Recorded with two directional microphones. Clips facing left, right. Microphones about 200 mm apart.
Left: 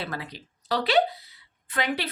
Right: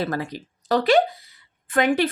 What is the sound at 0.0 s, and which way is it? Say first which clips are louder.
Speech: right 8 dB; 45° right (ahead or behind).